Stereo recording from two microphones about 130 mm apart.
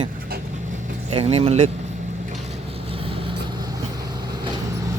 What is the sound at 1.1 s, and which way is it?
Speech, 50° right (ahead or behind).